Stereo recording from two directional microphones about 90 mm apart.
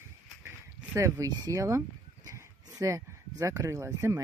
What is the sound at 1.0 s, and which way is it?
Speech, 35° right (ahead or behind).